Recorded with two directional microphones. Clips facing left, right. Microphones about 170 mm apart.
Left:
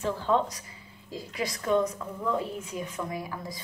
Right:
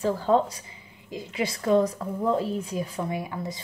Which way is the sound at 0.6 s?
20° right (ahead or behind).